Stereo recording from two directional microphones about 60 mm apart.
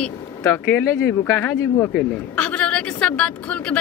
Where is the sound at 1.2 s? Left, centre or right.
Left.